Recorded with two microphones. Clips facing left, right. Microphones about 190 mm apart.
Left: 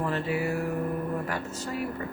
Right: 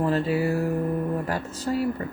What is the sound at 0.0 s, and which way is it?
Music, 30° right (ahead or behind).